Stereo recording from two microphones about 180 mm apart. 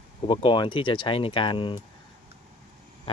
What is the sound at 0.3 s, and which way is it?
Speech, 30° left (ahead or behind).